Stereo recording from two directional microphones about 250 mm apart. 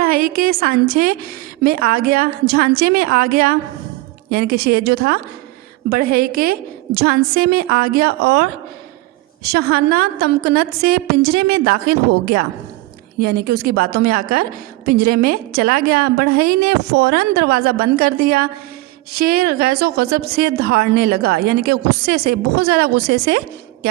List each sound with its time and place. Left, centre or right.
0.0 s a woman's voice: right